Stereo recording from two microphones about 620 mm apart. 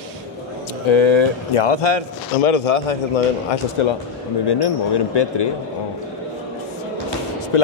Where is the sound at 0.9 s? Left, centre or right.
Left.